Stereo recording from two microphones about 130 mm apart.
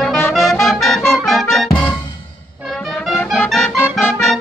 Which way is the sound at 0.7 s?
Centre (ahead or behind).